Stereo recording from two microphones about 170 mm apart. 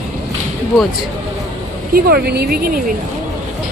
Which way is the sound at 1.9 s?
65° right (ahead or behind).